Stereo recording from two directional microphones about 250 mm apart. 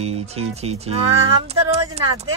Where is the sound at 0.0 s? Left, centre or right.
Right.